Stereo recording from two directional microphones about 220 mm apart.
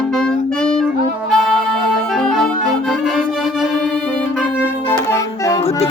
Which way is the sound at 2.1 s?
Centre (ahead or behind).